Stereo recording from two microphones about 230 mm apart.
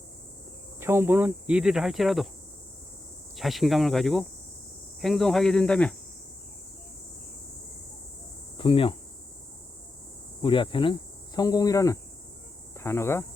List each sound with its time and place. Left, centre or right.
0.8 s speech: centre
3.3 s speech: centre
8.5 s cricket: left
10.4 s speech: left